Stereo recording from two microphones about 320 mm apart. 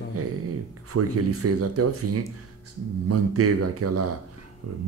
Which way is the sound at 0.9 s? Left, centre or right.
Right.